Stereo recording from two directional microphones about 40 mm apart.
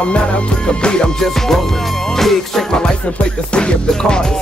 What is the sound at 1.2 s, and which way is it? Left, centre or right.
Music, centre.